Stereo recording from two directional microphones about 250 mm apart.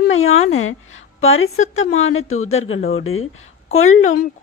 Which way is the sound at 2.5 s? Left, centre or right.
Left.